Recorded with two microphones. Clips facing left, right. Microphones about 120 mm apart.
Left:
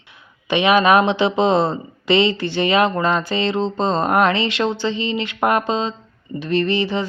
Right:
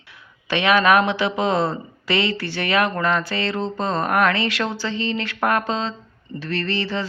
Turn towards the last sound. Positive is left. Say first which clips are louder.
# left 6 dB
turn(degrees=20)  # may be behind; listen again after turning